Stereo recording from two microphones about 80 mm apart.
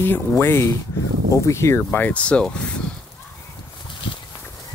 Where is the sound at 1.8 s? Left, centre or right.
Left.